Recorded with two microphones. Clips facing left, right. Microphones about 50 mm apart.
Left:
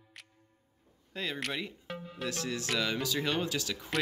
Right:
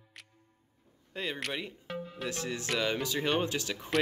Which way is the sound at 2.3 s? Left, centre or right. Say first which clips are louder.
Even; right.